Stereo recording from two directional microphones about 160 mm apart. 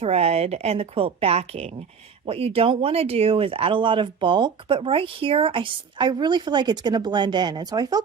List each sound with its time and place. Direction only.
0.0 s speech: 40° right (ahead or behind); by 8.0 s 25° right (ahead or behind)